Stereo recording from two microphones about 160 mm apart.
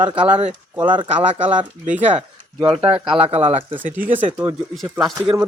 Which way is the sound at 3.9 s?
10° right (ahead or behind).